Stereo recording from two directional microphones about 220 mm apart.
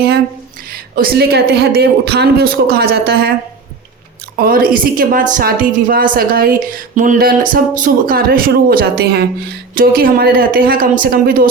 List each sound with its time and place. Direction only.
0.9 s speech: 45° right (ahead or behind)
4.4 s a woman's voice: 40° right (ahead or behind)